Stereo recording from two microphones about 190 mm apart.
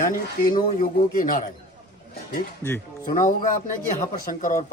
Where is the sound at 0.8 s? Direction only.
45° left (ahead or behind).